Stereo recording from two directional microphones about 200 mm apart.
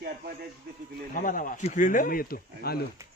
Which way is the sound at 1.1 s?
40° left (ahead or behind).